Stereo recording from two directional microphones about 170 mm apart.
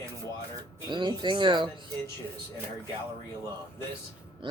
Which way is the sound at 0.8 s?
25° right (ahead or behind).